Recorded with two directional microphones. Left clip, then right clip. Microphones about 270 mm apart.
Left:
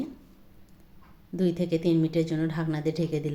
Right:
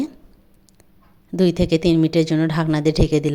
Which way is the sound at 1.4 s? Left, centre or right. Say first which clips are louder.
Right 9 dB; right.